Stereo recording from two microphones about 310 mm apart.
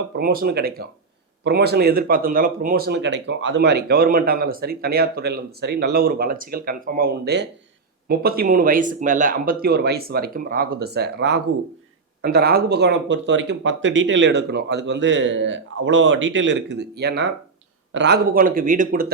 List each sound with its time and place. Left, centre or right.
0.2 s speech: right